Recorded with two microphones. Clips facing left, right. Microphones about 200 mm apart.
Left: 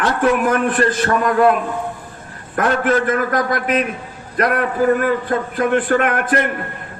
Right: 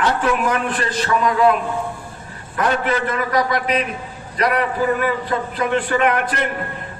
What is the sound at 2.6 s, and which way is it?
A man's voice, 50° left (ahead or behind).